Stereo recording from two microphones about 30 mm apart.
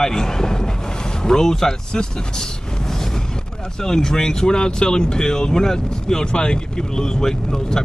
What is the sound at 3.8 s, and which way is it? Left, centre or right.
Speech, left.